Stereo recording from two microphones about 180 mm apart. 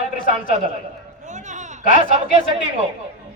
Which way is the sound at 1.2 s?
40° right (ahead or behind).